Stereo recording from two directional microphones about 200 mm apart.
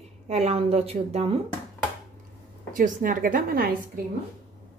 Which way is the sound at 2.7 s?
40° right (ahead or behind).